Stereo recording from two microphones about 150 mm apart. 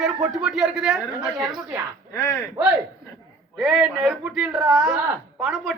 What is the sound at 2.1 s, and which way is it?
Speech, 15° left (ahead or behind).